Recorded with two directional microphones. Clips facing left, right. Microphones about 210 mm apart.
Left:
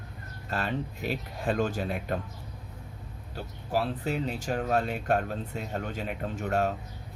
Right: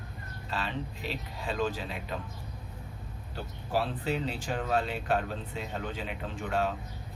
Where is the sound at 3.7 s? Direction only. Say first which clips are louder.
Left 1 dB; 45° left (ahead or behind).